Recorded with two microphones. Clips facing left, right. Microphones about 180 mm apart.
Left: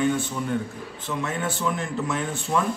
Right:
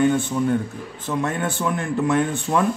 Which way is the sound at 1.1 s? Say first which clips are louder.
Right 4 dB; 55° right (ahead or behind).